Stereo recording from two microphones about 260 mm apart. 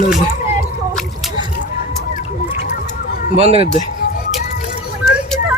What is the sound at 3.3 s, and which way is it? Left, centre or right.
Speech, right.